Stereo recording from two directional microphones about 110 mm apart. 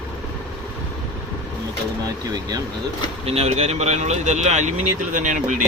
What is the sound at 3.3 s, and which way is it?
Speech, 70° right (ahead or behind).